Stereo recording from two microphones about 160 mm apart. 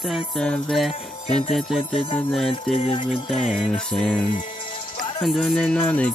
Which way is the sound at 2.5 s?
35° left (ahead or behind).